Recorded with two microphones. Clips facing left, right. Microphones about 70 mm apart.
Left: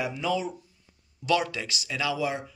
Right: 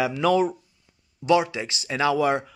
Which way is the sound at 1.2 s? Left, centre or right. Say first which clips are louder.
Right 5 dB; right.